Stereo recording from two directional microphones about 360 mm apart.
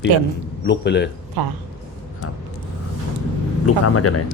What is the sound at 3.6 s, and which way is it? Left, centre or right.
Speech, left.